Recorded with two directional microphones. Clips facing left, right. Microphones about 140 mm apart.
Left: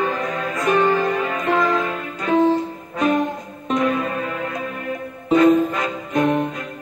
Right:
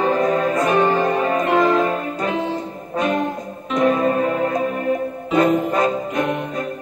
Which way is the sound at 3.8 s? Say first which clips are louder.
Right 7 dB; 35° right (ahead or behind).